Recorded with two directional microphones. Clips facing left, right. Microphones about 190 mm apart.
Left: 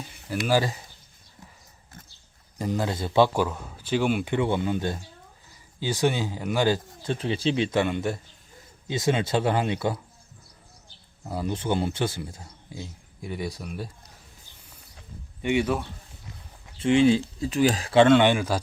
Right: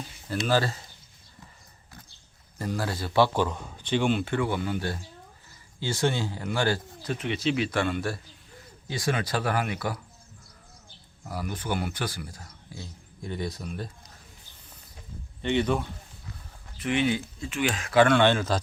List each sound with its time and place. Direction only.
0.4 s a man's voice: 15° left (ahead or behind)
2.6 s a man's voice: 20° left (ahead or behind)
4.4 s a man's voice: 20° left (ahead or behind)
7.1 s a man's voice: 30° left (ahead or behind)
11.2 s a man's voice: 25° left (ahead or behind)
15.4 s a man's voice: 10° left (ahead or behind)
16.7 s a man's voice: 30° left (ahead or behind); by 18.6 s 10° left (ahead or behind)